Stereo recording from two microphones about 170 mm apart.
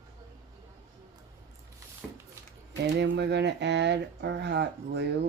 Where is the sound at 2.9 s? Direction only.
90° right.